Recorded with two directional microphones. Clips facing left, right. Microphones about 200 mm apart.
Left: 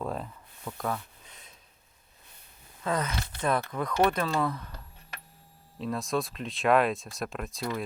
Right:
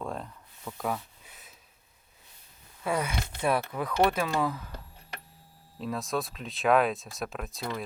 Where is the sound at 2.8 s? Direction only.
10° right (ahead or behind).